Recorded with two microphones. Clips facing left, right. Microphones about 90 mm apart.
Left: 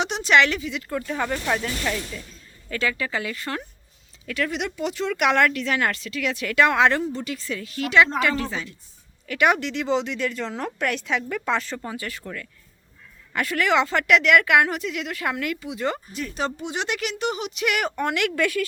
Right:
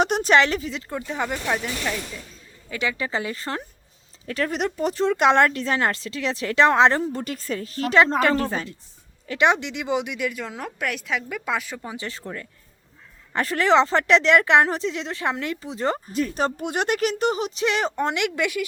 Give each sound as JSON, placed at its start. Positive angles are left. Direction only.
{"t": 0.0, "sound": "speech", "side_deg": -45}
{"t": 0.9, "sound": "speech", "side_deg": -20}
{"t": 2.6, "sound": "speech", "side_deg": -20}
{"t": 7.1, "sound": "speech", "side_deg": -45}
{"t": 9.2, "sound": "speech", "side_deg": -25}
{"t": 11.9, "sound": "speech", "side_deg": -25}